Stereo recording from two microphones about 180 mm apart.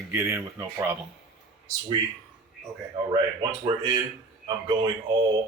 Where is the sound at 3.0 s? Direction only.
25° right (ahead or behind).